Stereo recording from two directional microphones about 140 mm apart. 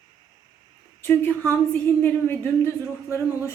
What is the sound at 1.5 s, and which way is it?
Speech, 15° left (ahead or behind).